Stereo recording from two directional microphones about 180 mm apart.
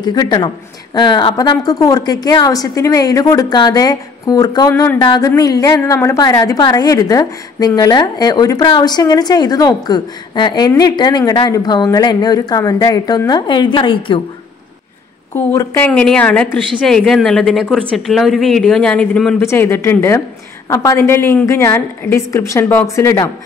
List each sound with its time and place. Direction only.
0.0 s a woman's voice: 25° left (ahead or behind)
15.3 s a woman's voice: 10° left (ahead or behind)